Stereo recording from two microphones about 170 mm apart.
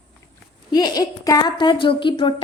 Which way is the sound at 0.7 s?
20° left (ahead or behind).